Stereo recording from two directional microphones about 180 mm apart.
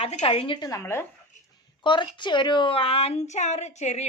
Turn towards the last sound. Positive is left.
turn(degrees=40)  # may be behind; listen again after turning